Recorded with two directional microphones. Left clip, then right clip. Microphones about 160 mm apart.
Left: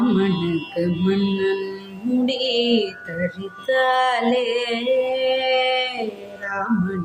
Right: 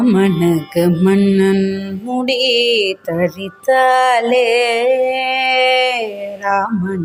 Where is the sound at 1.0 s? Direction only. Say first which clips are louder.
Right 6 dB; 55° right (ahead or behind).